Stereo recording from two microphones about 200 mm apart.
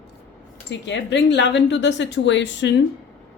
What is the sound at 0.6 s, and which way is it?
A woman's voice, 60° left (ahead or behind).